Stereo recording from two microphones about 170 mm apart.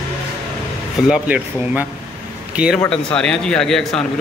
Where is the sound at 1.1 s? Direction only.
10° right (ahead or behind).